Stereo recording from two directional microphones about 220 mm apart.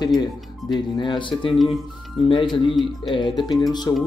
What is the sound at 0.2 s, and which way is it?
Speech, 20° left (ahead or behind).